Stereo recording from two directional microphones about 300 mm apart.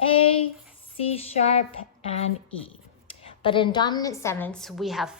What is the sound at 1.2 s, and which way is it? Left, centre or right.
Speech, centre.